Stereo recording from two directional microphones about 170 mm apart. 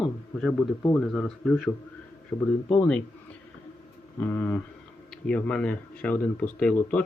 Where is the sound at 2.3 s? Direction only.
15° left (ahead or behind).